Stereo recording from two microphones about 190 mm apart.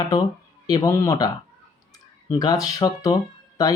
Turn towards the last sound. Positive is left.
turn(degrees=15)  # may be behind; listen again after turning